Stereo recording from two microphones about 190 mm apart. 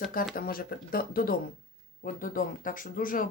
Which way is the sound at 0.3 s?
50° left (ahead or behind).